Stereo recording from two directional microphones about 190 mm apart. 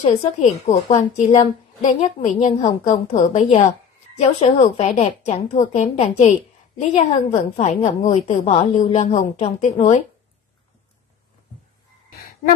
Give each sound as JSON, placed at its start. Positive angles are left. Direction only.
{"t": 0.0, "sound": "a woman's voice", "side_deg": 35}